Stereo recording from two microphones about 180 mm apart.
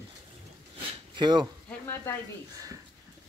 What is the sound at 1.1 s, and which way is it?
Speech, 25° right (ahead or behind).